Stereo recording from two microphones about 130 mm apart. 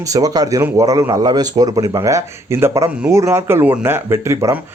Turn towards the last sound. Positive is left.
turn(degrees=-20)  # may be behind; listen again after turning